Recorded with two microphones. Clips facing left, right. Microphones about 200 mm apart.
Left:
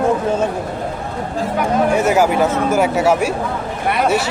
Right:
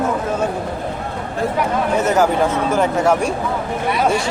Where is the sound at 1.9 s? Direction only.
10° left (ahead or behind).